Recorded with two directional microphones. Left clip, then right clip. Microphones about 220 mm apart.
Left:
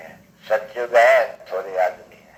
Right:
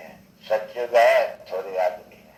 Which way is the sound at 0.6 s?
15° right (ahead or behind).